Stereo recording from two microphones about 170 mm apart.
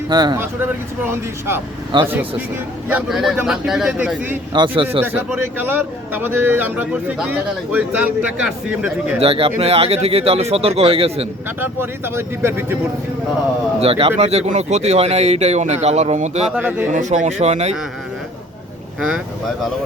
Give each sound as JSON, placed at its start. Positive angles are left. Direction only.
{"t": 0.1, "sound": "speech", "side_deg": -25}
{"t": 0.3, "sound": "speech", "side_deg": -15}
{"t": 1.9, "sound": "speech", "side_deg": -30}
{"t": 2.9, "sound": "speech", "side_deg": 0}
{"t": 4.5, "sound": "speech", "side_deg": -30}
{"t": 5.5, "sound": "speech", "side_deg": -10}
{"t": 9.2, "sound": "speech", "side_deg": -35}
{"t": 11.6, "sound": "speech", "side_deg": -15}
{"t": 13.7, "sound": "speech", "side_deg": -35}
{"t": 16.5, "sound": "speech", "side_deg": -10}
{"t": 16.9, "sound": "speech", "side_deg": -45}
{"t": 18.9, "sound": "speech", "side_deg": -5}